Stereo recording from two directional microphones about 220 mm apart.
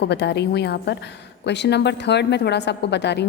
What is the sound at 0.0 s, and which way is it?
A woman's voice, 50° left (ahead or behind).